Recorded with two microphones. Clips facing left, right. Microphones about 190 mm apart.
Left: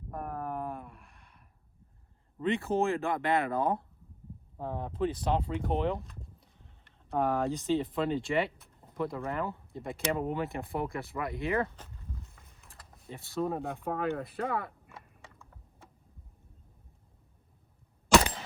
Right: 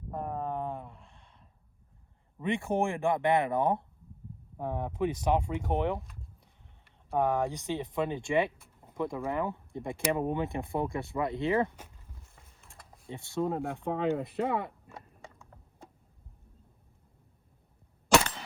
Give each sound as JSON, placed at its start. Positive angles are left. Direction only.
{"t": 0.1, "sound": "a sound", "side_deg": -20}
{"t": 2.4, "sound": "speech", "side_deg": -15}
{"t": 13.1, "sound": "speech", "side_deg": -20}